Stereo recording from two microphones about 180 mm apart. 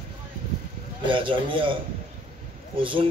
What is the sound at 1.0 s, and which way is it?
Speech, 25° right (ahead or behind).